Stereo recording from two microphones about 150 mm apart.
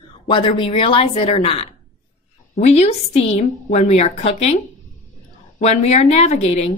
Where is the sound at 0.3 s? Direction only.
35° left (ahead or behind).